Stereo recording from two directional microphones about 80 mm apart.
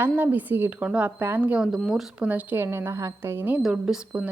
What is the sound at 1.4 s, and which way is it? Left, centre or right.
Speech, centre.